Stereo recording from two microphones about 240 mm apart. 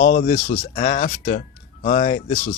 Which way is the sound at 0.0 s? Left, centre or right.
Left.